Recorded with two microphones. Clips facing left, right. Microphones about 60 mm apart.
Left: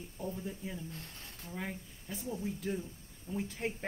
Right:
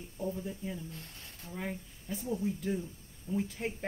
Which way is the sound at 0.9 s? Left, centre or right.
Left.